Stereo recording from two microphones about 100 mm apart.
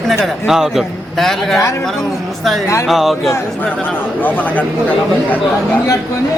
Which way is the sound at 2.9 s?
Centre (ahead or behind).